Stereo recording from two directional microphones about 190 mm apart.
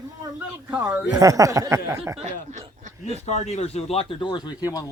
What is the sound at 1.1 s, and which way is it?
Speech, 15° right (ahead or behind).